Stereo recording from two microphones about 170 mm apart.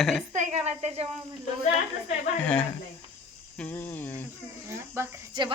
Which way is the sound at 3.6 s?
10° left (ahead or behind).